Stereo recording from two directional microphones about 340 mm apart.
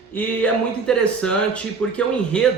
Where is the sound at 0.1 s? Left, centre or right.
Centre.